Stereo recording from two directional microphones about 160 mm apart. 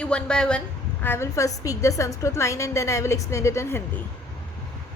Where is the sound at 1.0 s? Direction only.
15° left (ahead or behind).